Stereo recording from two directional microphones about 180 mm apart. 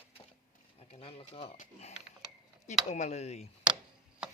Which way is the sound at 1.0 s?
30° left (ahead or behind).